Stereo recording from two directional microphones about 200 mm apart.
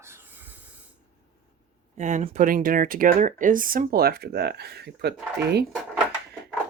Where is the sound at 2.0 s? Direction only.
35° right (ahead or behind); by 5.1 s 55° right (ahead or behind).